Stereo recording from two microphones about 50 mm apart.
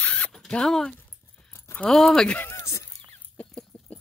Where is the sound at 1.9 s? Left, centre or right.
Centre.